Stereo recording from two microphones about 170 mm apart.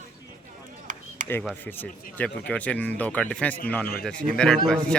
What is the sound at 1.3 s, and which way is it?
A man's voice, 10° left (ahead or behind).